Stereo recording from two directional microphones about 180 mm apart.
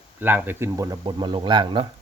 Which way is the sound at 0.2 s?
10° right (ahead or behind).